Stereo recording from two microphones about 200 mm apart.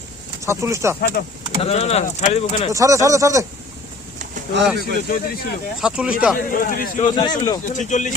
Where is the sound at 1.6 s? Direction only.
30° left (ahead or behind).